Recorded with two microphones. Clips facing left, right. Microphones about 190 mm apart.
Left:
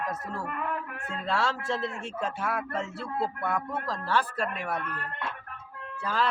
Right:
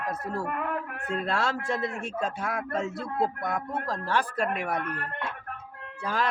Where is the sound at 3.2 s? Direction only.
15° right (ahead or behind).